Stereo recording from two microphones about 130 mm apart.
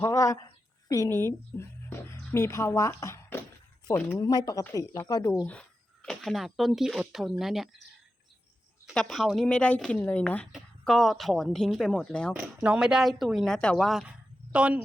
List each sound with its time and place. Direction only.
0.0 s speech: 25° left (ahead or behind)
5.5 s speech: 5° left (ahead or behind)
8.9 s speech: centre (ahead or behind)
10.5 s speech: centre (ahead or behind)
12.4 s speech: 10° right (ahead or behind)